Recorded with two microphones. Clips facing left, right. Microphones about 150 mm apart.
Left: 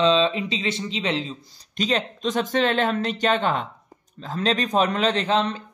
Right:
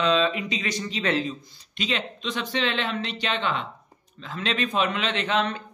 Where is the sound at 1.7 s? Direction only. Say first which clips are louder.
Left 5 dB; 40° left (ahead or behind).